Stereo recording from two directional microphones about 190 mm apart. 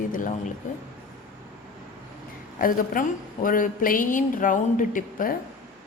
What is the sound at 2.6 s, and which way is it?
Speech, 45° left (ahead or behind).